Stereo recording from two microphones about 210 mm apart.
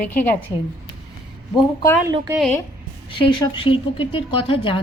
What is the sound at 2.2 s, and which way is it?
Speech, centre (ahead or behind).